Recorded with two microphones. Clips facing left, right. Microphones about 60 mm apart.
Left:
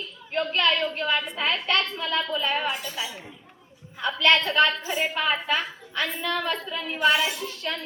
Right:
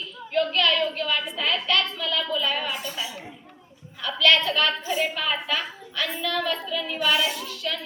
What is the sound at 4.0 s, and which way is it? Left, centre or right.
A woman's voice, left.